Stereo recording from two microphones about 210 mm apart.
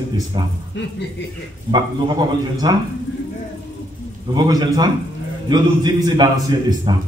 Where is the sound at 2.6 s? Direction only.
20° right (ahead or behind).